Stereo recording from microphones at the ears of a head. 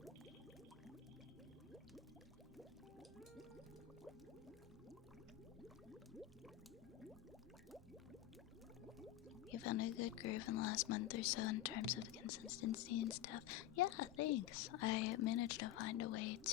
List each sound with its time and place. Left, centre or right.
9.5 s speech: left